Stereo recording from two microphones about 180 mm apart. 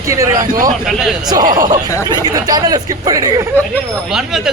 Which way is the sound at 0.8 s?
Centre (ahead or behind).